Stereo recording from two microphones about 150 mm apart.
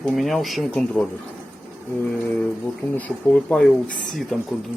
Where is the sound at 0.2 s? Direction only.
Centre (ahead or behind).